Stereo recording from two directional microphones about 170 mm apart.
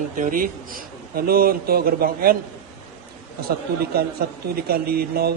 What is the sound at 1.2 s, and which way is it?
A man's voice, 65° right (ahead or behind).